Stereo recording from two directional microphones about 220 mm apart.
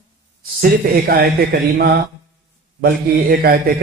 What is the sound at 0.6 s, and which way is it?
A man's voice, 40° right (ahead or behind).